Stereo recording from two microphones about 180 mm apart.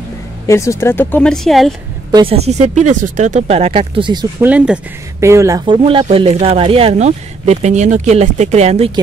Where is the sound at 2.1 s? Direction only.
30° right (ahead or behind).